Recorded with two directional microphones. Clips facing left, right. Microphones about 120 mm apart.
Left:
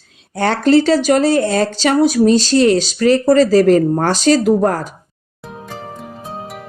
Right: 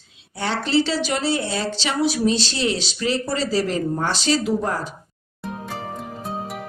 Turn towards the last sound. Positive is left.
turn(degrees=0)  # may be behind; listen again after turning